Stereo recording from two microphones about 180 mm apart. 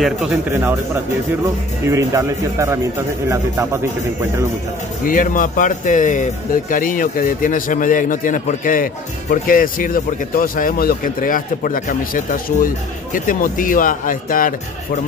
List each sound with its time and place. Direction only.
0.0 s a man's voice: 5° right (ahead or behind)
1.9 s speech: 15° right (ahead or behind)
5.0 s speech: 50° left (ahead or behind)